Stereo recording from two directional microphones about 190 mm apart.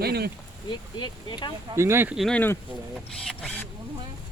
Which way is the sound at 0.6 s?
25° left (ahead or behind).